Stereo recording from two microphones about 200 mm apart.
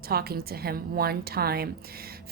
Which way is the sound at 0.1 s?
50° right (ahead or behind).